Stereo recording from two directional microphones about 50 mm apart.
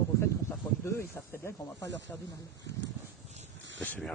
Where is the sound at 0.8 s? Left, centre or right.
Left.